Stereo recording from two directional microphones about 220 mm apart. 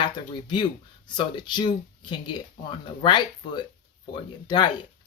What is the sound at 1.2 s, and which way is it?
Speech, 20° left (ahead or behind).